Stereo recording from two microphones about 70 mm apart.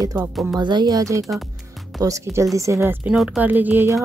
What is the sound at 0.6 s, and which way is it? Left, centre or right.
A woman's voice, right.